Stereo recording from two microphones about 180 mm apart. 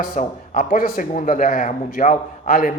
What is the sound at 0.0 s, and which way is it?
Speech, 50° left (ahead or behind).